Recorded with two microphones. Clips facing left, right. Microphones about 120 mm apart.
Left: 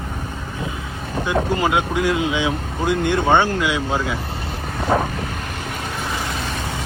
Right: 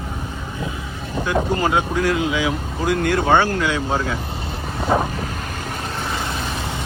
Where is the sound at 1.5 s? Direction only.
15° left (ahead or behind).